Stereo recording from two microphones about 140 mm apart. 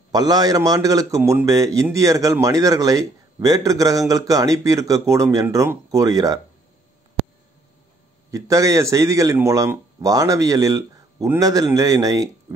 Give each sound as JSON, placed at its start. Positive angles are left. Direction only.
{"t": 0.1, "sound": "a man's voice", "side_deg": -30}
{"t": 8.3, "sound": "a man's voice", "side_deg": -25}